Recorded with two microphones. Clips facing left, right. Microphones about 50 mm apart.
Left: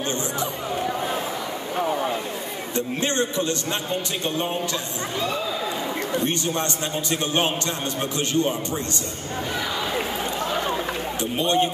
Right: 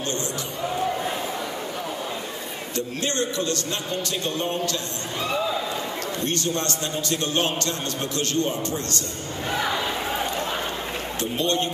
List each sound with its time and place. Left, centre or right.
2.7 s a man's voice: left
6.1 s a man's voice: centre
11.1 s speech: centre